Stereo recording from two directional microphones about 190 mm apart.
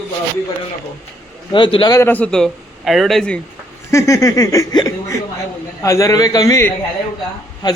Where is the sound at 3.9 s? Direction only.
15° left (ahead or behind).